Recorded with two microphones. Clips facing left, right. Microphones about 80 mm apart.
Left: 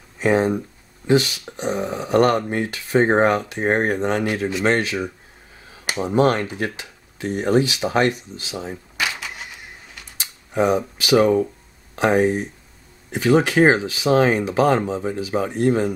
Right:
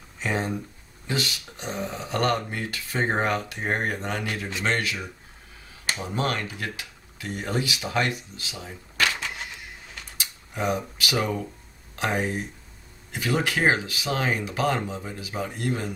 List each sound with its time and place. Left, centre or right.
0.3 s speech: left
8.9 s a sound: centre
10.6 s speech: left
11.1 s speech: left